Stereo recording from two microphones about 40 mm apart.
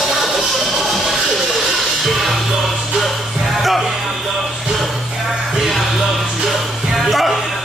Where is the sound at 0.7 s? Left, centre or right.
Centre.